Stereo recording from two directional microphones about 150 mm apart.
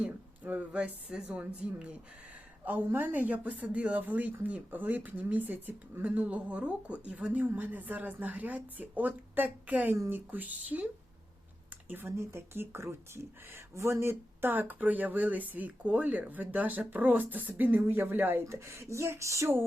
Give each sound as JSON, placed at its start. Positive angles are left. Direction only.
{"t": 0.0, "sound": "speech", "side_deg": -10}